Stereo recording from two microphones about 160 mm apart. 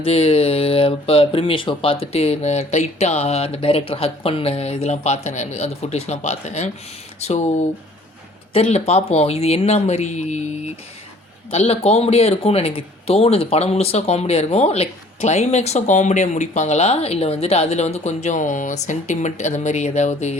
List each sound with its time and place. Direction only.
0.0 s speech: 40° left (ahead or behind)
8.5 s speech: 40° left (ahead or behind)
11.5 s speech: 40° left (ahead or behind)